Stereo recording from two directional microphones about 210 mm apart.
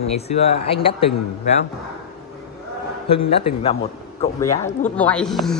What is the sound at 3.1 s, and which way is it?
Speech, 25° left (ahead or behind).